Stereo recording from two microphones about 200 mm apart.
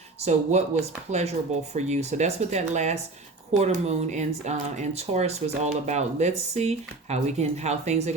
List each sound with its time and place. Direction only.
0.2 s speech: 35° right (ahead or behind)